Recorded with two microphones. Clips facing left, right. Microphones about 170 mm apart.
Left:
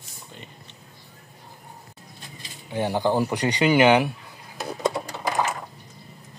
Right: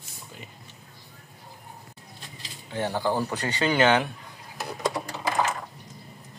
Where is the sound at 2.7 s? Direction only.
15° left (ahead or behind).